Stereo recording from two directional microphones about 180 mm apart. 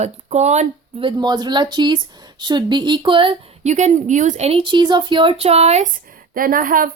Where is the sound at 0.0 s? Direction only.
40° right (ahead or behind).